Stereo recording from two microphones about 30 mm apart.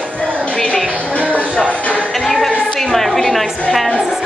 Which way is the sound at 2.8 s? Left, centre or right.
Centre.